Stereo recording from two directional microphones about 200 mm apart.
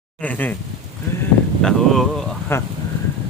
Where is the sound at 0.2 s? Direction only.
10° left (ahead or behind).